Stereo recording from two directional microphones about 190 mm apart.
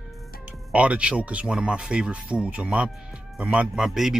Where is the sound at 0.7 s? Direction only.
5° right (ahead or behind).